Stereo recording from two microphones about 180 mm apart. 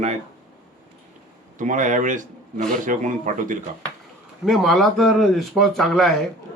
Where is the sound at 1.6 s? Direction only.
45° right (ahead or behind).